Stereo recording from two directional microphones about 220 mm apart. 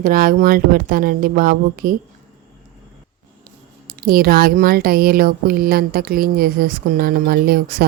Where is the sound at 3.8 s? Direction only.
45° right (ahead or behind).